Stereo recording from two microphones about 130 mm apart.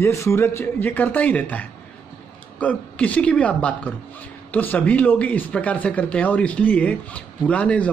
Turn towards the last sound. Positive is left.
turn(degrees=10)  # may be behind; listen again after turning